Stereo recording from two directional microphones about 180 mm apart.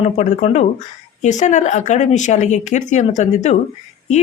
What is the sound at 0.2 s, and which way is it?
Speech, 40° left (ahead or behind).